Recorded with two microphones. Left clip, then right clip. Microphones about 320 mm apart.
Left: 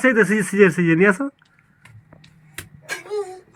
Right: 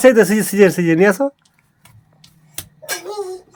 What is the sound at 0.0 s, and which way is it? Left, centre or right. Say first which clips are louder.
Speech: right 6 dB; centre.